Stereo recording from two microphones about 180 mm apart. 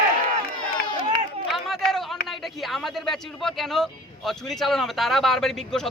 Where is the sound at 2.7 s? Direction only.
Centre (ahead or behind).